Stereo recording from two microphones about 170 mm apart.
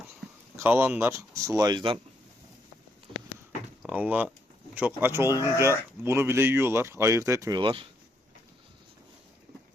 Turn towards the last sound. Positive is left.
turn(degrees=-30)  # may be behind; listen again after turning